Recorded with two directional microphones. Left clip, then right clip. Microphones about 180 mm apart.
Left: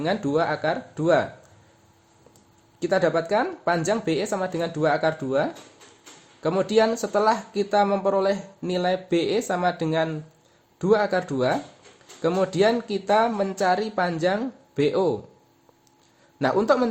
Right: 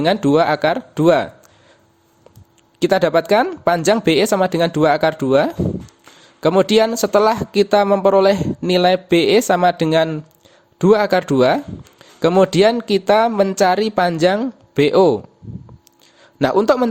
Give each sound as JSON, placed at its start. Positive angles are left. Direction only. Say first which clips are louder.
{"t": 0.0, "sound": "speech", "louder": "right 9 dB", "side_deg": -45}
{"t": 2.7, "sound": "speech", "louder": "right 7 dB", "side_deg": -50}
{"t": 16.4, "sound": "speech", "louder": "right 6 dB", "side_deg": -45}